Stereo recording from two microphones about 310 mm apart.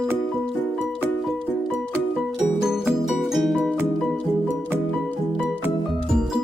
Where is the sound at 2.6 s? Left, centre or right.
Centre.